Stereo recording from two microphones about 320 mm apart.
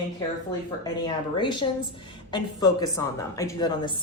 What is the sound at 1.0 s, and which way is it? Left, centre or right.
Speech, centre.